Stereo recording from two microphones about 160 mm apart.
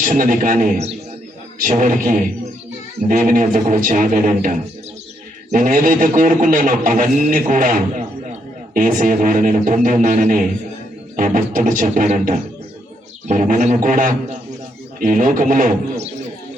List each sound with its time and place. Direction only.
0.0 s a man's voice: 55° right (ahead or behind)
1.6 s music: 55° right (ahead or behind)
3.1 s a man's voice: 55° right (ahead or behind)
11.2 s music: 55° right (ahead or behind)
13.7 s a man's voice: 55° right (ahead or behind)